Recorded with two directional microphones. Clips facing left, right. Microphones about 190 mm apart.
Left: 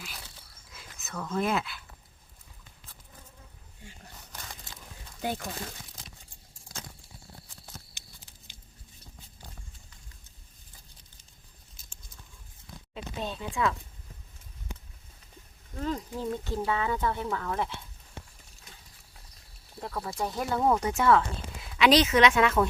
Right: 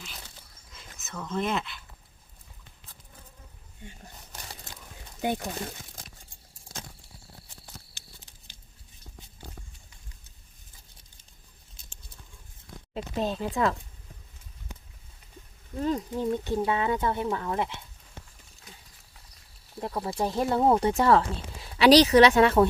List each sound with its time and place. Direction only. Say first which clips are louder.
0.7 s speech: left 1 dB; centre (ahead or behind)
5.2 s speech: right 4 dB; 20° right (ahead or behind)
12.9 s speech: right 6 dB; 35° right (ahead or behind)
15.8 s speech: right 4 dB; 20° right (ahead or behind)
19.8 s speech: right 4 dB; 20° right (ahead or behind)
20.1 s speech: right 5 dB; 30° right (ahead or behind)